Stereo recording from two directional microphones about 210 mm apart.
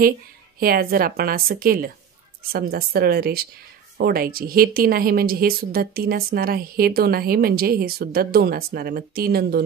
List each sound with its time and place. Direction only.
0.6 s a woman's voice: 45° right (ahead or behind)